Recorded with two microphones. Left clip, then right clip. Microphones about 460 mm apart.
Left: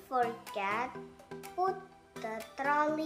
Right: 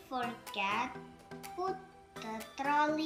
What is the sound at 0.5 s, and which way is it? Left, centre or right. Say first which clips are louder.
Music: even; centre.